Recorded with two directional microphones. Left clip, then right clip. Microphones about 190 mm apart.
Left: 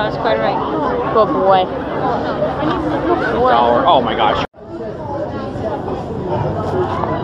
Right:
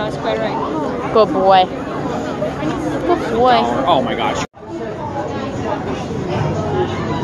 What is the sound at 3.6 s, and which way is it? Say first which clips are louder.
Speech: left 3 dB; 75° right (ahead or behind).